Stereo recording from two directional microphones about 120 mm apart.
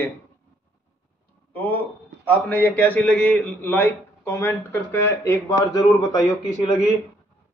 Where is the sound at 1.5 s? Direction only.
15° left (ahead or behind).